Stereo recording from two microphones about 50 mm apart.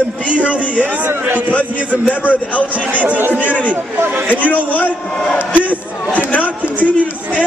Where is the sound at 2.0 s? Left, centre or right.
Left.